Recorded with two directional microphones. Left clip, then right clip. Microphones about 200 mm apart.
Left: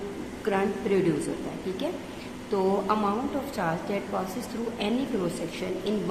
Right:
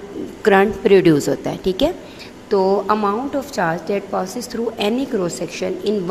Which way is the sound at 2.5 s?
35° right (ahead or behind).